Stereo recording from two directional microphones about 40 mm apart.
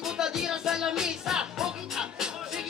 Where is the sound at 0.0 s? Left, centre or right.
Centre.